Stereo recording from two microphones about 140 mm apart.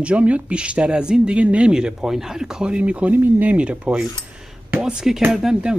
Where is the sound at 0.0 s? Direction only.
10° right (ahead or behind).